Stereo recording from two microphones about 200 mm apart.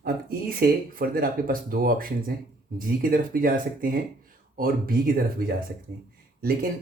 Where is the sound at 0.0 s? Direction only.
50° right (ahead or behind).